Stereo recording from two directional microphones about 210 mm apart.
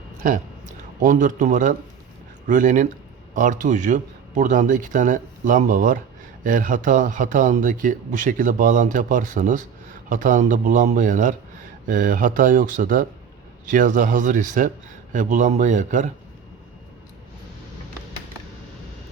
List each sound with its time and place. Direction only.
1.0 s a man's voice: 35° right (ahead or behind)